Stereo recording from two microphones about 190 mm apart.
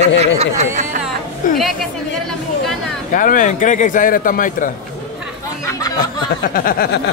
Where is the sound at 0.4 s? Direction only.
35° right (ahead or behind).